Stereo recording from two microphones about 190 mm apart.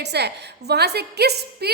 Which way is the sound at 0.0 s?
60° right (ahead or behind).